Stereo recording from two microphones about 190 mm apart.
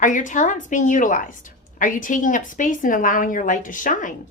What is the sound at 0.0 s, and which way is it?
A woman's voice, 45° left (ahead or behind).